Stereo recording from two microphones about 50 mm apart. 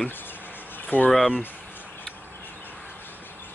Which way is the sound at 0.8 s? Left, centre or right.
Left.